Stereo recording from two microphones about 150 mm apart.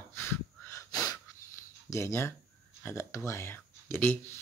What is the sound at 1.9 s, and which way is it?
Speech, 20° left (ahead or behind).